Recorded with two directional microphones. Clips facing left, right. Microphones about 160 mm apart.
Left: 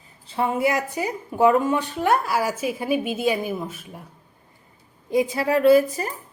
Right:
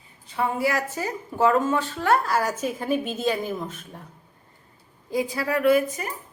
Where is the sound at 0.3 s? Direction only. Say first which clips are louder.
Left 3 dB; 25° left (ahead or behind); by 4.0 s 10° left (ahead or behind).